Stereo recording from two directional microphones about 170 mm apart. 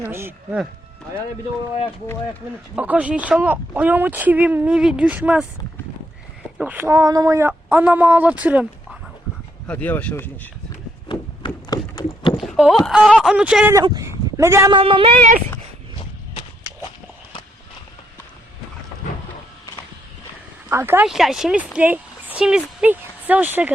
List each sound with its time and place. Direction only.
0.0 s speech: 15° right (ahead or behind)
2.7 s speech: 10° right (ahead or behind)
6.6 s speech: 10° right (ahead or behind)
9.6 s speech: 10° left (ahead or behind)
11.1 s a sound: 25° left (ahead or behind)
12.4 s a sound: centre (ahead or behind)
12.8 s speech: centre (ahead or behind)
13.8 s a sound: 20° right (ahead or behind)
14.7 s speech: 30° right (ahead or behind)
20.7 s speech: 15° right (ahead or behind)
21.1 s speech: centre (ahead or behind)